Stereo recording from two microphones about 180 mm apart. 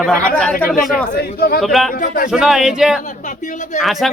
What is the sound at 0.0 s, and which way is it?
Speech, 5° left (ahead or behind).